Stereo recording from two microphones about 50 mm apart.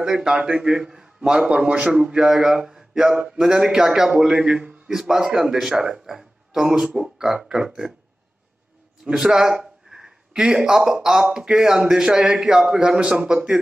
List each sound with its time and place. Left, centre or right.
0.0 s a man's voice: centre
9.1 s a man's voice: centre